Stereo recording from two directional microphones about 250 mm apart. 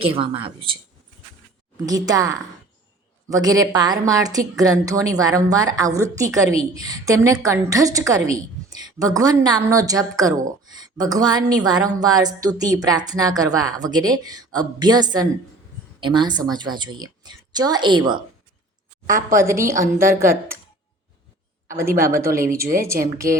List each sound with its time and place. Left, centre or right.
0.0 s speech: right
2.0 s speech: centre
19.0 s a woman's voice: right
19.4 s speech: centre
21.7 s speech: centre
22.3 s a woman's voice: right
23.1 s speech: centre